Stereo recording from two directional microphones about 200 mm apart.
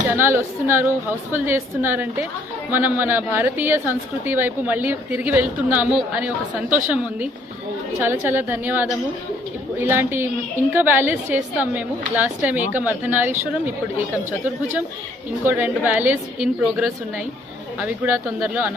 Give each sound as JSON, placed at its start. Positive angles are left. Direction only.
{"t": 0.2, "sound": "a woman's voice", "side_deg": -10}